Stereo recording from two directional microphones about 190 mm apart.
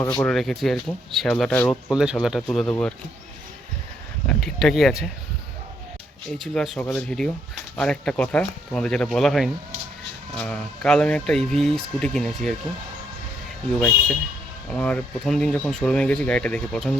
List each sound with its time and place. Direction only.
0.0 s speech: 15° left (ahead or behind)
0.3 s speech: centre (ahead or behind)
1.9 s speech: 5° right (ahead or behind)
4.3 s speech: 5° left (ahead or behind)
6.4 s speech: centre (ahead or behind)
13.7 s speech: 5° left (ahead or behind)